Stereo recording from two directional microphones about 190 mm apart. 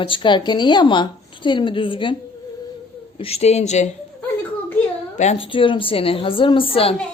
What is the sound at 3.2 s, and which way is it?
Speech, 35° left (ahead or behind).